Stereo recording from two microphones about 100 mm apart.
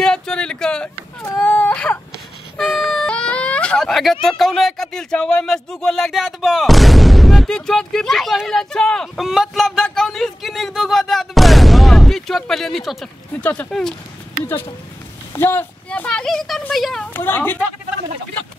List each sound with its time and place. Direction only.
0.0 s a sound: 5° left (ahead or behind)
1.4 s whimper: 15° left (ahead or behind)
2.5 s speech: 5° left (ahead or behind)
13.3 s speech: 15° left (ahead or behind)
13.7 s speech: 5° left (ahead or behind)
15.3 s a woman's voice: 20° left (ahead or behind)
15.9 s speech: 10° left (ahead or behind)
17.0 s a woman's voice: 20° left (ahead or behind)